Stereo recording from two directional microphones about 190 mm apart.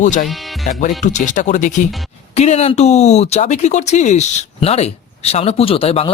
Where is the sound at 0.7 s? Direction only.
40° left (ahead or behind).